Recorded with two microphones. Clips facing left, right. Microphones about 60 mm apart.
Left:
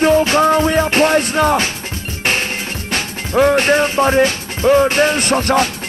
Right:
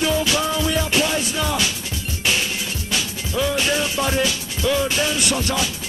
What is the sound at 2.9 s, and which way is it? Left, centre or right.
Music, left.